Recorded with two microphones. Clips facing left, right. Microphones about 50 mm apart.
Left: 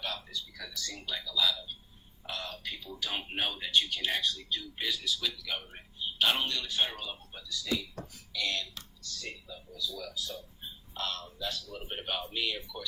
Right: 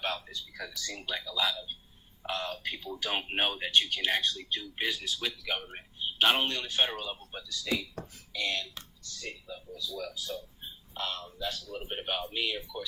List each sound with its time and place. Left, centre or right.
0.0 s speech: right; by 12.8 s centre